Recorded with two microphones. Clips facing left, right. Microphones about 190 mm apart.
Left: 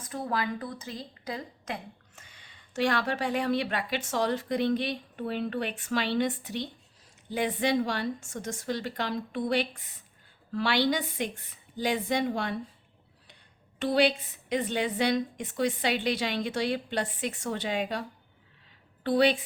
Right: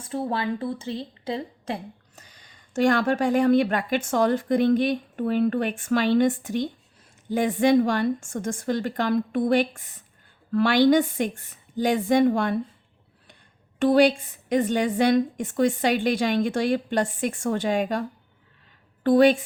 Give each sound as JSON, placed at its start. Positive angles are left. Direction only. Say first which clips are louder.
{"t": 0.0, "sound": "a woman's voice", "louder": "right 5 dB", "side_deg": -30}
{"t": 13.7, "sound": "a woman's voice", "louder": "right 7 dB", "side_deg": -50}
{"t": 19.0, "sound": "a woman's voice", "louder": "right 7 dB", "side_deg": -45}